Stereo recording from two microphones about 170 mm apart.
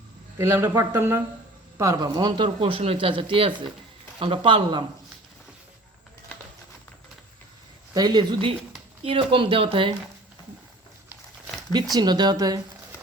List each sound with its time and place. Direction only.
0.3 s speech: 15° right (ahead or behind); by 4.8 s 30° right (ahead or behind)
7.9 s speech: 25° right (ahead or behind)
11.9 s speech: 25° right (ahead or behind)